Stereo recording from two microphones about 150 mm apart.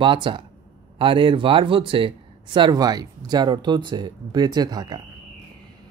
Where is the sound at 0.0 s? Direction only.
35° right (ahead or behind).